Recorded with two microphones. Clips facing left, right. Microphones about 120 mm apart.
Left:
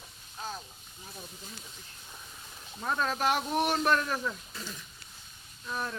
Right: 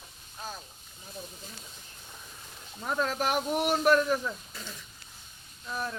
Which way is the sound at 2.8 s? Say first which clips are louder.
Even; 5° right (ahead or behind).